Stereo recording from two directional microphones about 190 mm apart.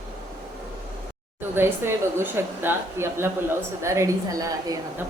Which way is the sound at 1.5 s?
10° right (ahead or behind).